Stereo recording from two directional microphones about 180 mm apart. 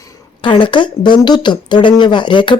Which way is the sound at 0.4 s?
25° left (ahead or behind).